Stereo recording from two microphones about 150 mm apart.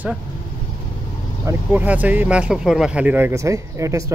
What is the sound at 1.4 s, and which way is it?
Speech, 15° right (ahead or behind).